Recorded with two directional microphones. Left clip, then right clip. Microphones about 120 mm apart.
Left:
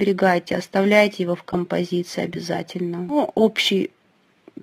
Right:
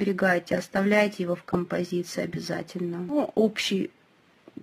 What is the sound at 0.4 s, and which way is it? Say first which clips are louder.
Speech: left 5 dB; 15° left (ahead or behind).